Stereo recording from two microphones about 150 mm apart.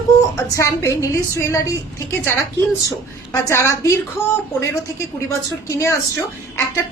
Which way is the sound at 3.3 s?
20° left (ahead or behind).